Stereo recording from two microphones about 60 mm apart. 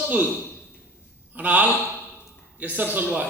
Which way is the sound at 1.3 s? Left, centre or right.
Right.